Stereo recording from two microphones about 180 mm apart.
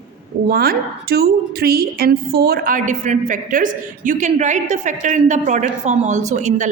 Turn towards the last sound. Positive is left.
turn(degrees=-40)  # may be behind; listen again after turning